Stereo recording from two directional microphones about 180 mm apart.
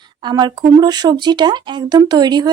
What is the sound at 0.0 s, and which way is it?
Speech, 25° right (ahead or behind).